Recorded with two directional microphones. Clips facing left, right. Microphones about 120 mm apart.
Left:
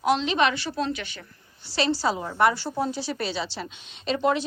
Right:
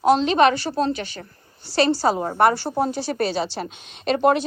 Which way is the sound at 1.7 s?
50° right (ahead or behind).